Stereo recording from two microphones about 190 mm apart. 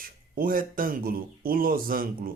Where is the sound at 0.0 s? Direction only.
50° right (ahead or behind).